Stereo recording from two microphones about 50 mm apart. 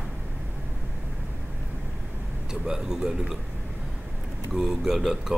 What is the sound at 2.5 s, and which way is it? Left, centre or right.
Speech, centre.